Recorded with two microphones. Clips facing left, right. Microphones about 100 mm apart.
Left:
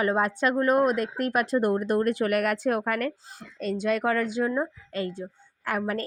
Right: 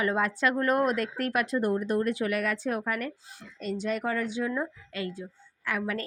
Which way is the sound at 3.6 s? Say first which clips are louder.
Left 5 dB; 90° left.